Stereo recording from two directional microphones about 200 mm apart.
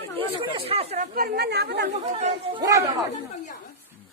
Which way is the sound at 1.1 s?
45° right (ahead or behind).